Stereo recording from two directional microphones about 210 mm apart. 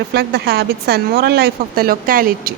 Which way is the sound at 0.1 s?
50° right (ahead or behind).